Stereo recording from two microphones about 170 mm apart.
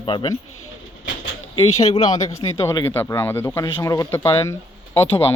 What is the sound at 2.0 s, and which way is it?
Speech, 40° left (ahead or behind).